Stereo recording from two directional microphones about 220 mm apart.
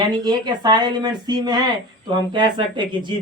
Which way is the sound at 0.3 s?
20° right (ahead or behind).